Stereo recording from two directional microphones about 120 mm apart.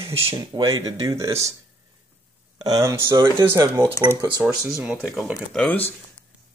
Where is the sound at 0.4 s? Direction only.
30° right (ahead or behind).